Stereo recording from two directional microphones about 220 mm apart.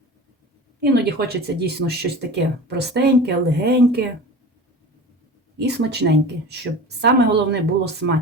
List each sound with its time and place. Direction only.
0.8 s speech: 45° right (ahead or behind)
5.6 s speech: 50° right (ahead or behind)